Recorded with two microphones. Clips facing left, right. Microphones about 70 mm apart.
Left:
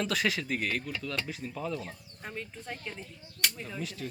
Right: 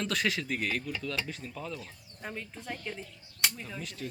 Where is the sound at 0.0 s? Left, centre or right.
Centre.